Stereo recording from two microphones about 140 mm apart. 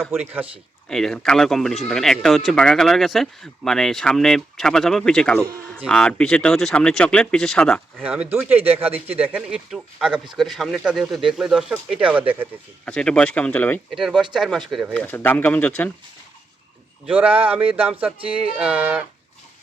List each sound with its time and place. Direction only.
0.1 s speech: 10° right (ahead or behind)
0.9 s speech: 5° left (ahead or behind)
8.0 s speech: 10° right (ahead or behind)
12.8 s speech: 5° left (ahead or behind)
13.9 s speech: centre (ahead or behind)
14.9 s speech: 15° left (ahead or behind)
17.1 s speech: 10° right (ahead or behind)
18.2 s speech: 40° right (ahead or behind)
18.6 s speech: 10° right (ahead or behind)